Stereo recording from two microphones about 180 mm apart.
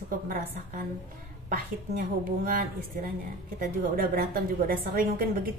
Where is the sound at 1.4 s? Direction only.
50° right (ahead or behind).